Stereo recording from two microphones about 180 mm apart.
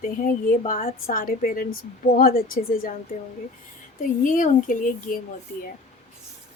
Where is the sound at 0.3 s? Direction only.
50° left (ahead or behind).